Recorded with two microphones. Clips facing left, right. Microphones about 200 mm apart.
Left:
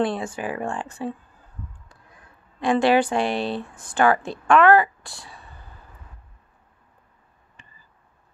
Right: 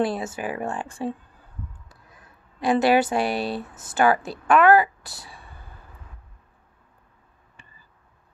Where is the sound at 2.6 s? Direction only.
10° right (ahead or behind).